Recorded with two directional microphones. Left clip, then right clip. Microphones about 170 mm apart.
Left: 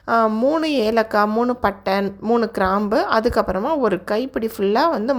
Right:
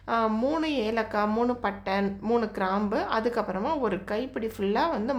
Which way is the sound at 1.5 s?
40° left (ahead or behind).